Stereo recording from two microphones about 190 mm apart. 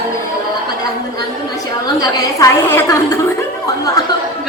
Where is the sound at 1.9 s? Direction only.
15° left (ahead or behind).